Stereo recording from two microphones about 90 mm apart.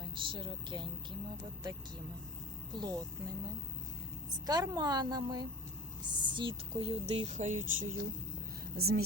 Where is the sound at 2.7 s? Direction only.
50° right (ahead or behind).